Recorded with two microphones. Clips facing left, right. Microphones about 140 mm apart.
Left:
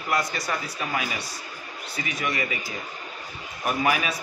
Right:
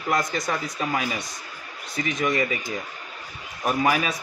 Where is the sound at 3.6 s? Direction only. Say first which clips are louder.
Right 2 dB; 30° right (ahead or behind).